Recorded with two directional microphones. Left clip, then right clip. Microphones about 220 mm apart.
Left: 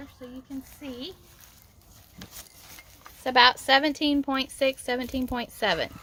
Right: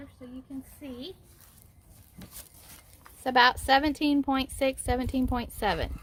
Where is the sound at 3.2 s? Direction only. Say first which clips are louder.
Left 3 dB; 25° right (ahead or behind).